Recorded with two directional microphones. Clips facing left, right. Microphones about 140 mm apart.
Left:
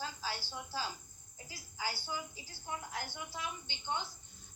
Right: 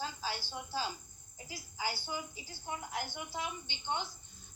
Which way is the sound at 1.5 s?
20° right (ahead or behind).